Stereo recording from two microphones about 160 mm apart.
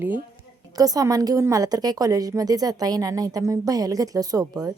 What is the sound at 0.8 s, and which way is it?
A woman's voice, 20° right (ahead or behind).